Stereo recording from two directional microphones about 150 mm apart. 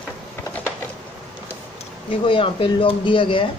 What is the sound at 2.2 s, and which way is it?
Speech, 35° left (ahead or behind).